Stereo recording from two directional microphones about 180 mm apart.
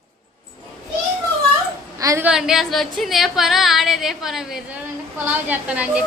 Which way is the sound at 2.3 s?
5° right (ahead or behind).